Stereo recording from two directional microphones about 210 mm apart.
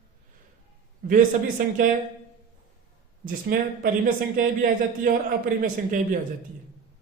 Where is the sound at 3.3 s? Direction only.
45° right (ahead or behind).